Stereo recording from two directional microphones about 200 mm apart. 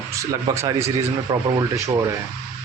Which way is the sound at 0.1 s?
15° right (ahead or behind).